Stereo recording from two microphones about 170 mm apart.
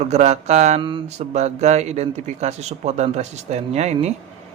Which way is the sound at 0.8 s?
30° right (ahead or behind).